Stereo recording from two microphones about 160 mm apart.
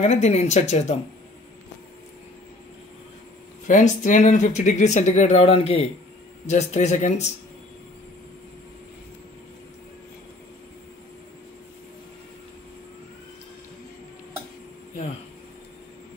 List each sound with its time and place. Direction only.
0.0 s speech: 45° left (ahead or behind)
3.6 s speech: 50° left (ahead or behind)